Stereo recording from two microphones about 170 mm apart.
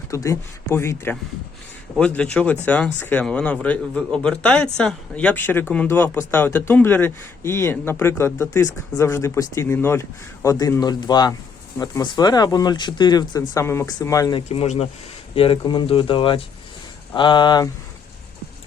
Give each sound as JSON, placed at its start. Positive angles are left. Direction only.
{"t": 0.1, "sound": "a man's voice", "side_deg": 20}
{"t": 14.5, "sound": "speech", "side_deg": 35}